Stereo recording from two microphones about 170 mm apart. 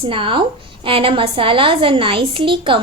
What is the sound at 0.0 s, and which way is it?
A woman's voice, 30° right (ahead or behind).